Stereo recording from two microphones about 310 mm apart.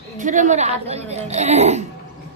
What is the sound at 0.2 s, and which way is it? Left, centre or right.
A woman's voice, right.